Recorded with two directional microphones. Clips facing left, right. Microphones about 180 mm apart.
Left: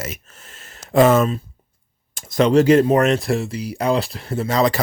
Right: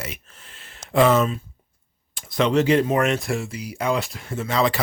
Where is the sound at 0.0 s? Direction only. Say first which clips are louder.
Left 4 dB; 45° left (ahead or behind).